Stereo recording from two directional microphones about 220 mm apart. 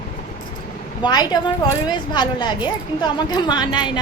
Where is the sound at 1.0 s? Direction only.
20° left (ahead or behind).